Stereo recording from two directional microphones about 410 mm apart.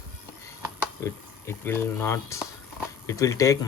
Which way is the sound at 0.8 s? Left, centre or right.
Centre.